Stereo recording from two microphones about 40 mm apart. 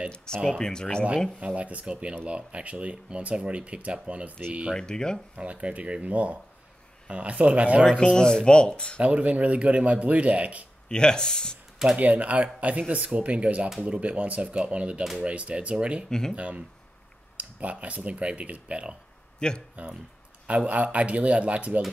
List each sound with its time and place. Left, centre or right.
0.1 s speech: centre
1.4 s speech: right
4.7 s speech: centre
5.3 s speech: right
8.1 s speech: centre
9.0 s speech: right
10.9 s speech: left
12.0 s speech: right
16.1 s speech: centre
16.3 s speech: right
19.4 s speech: left
19.8 s speech: right